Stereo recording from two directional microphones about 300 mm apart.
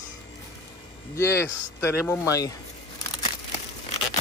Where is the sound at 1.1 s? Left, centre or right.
Centre.